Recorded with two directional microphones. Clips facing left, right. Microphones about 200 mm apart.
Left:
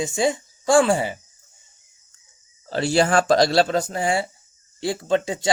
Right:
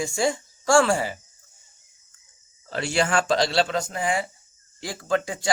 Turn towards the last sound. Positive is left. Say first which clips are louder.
# left 3 dB
turn(degrees=25)  # may be behind; listen again after turning